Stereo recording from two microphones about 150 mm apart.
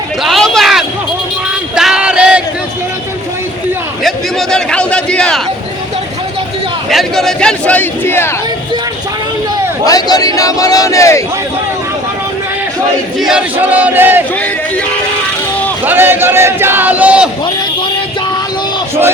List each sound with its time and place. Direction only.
0.2 s a sound: centre (ahead or behind)
4.0 s a sound: 5° left (ahead or behind)
6.9 s a man's voice: centre (ahead or behind)
9.8 s speech: 25° left (ahead or behind)
13.1 s speech: 5° right (ahead or behind)
15.9 s speech: 15° right (ahead or behind)